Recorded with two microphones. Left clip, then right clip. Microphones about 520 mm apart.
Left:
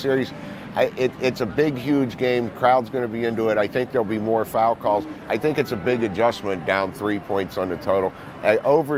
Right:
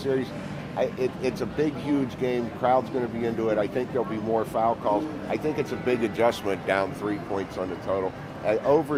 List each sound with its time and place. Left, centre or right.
0.0 s speech: left